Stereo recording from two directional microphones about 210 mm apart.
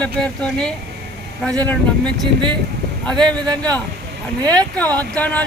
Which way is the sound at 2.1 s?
20° right (ahead or behind).